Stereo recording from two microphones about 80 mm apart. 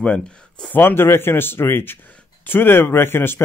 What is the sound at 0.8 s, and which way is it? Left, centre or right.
Speech, left.